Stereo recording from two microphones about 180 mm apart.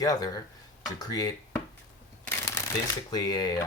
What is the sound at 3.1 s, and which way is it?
Speech, 20° left (ahead or behind).